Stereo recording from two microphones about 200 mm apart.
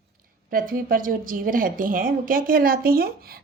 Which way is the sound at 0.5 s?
45° right (ahead or behind).